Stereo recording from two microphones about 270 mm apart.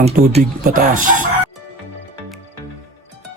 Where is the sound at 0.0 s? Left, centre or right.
Right.